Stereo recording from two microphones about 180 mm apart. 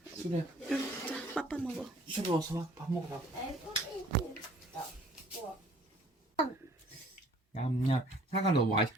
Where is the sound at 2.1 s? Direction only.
20° right (ahead or behind).